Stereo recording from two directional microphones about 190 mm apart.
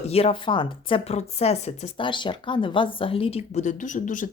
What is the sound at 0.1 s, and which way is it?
A woman's voice, 30° left (ahead or behind).